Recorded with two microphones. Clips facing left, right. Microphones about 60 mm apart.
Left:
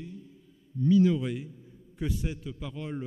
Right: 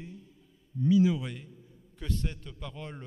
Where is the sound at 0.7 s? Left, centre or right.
Centre.